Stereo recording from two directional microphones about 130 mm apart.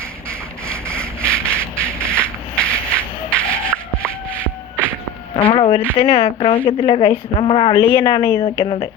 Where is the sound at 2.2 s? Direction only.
10° left (ahead or behind).